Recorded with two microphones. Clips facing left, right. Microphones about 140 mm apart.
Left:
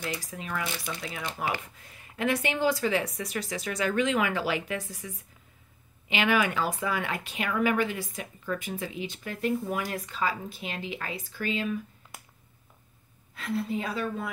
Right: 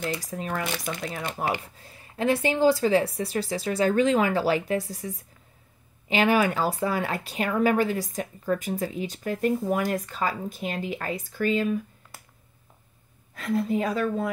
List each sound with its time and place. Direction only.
0.3 s a woman's voice: 40° right (ahead or behind)
1.6 s speech: 35° right (ahead or behind)
13.3 s a woman's voice: 40° right (ahead or behind)